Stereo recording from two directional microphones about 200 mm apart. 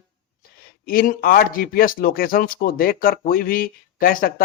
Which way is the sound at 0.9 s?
45° left (ahead or behind).